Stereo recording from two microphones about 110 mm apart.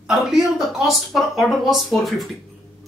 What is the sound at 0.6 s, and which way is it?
Speech, centre (ahead or behind).